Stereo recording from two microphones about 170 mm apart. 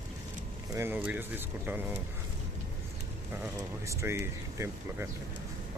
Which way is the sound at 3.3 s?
10° right (ahead or behind).